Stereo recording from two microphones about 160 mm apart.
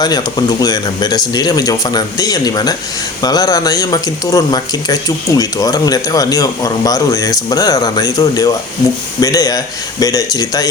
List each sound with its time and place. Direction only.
0.0 s speech: 25° left (ahead or behind)